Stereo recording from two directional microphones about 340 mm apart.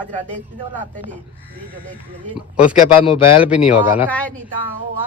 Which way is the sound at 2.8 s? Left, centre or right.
Centre.